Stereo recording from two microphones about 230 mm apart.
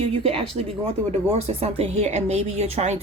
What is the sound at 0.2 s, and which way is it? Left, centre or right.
Speech, right.